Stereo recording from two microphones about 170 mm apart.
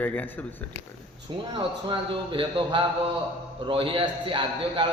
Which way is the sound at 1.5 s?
30° right (ahead or behind).